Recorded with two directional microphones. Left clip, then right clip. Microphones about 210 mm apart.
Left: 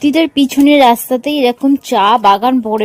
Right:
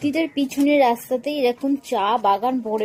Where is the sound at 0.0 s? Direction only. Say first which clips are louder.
Left 10 dB; 45° left (ahead or behind).